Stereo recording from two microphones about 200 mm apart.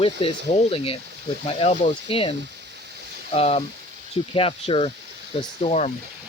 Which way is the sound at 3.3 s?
30° left (ahead or behind).